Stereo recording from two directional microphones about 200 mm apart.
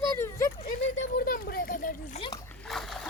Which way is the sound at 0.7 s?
40° left (ahead or behind).